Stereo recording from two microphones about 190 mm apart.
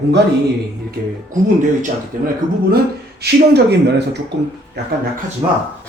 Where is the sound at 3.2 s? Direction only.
60° right (ahead or behind).